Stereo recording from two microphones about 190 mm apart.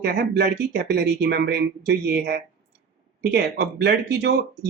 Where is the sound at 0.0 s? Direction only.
55° right (ahead or behind).